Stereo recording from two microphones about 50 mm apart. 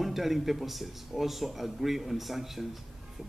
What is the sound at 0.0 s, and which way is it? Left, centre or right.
Speech, centre.